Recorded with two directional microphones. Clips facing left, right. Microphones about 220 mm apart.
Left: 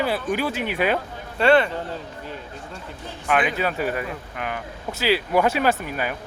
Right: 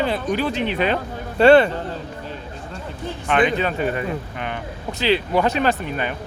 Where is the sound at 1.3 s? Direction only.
30° right (ahead or behind).